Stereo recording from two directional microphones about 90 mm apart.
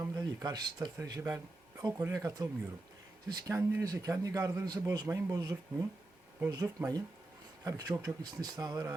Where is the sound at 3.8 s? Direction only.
40° right (ahead or behind).